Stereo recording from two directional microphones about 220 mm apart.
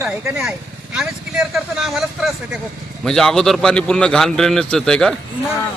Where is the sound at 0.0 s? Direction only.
5° right (ahead or behind).